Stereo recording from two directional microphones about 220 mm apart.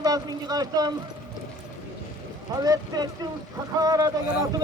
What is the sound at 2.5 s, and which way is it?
Speech, 15° right (ahead or behind).